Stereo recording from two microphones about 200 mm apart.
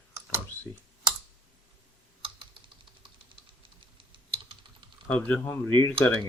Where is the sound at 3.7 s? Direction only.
25° right (ahead or behind).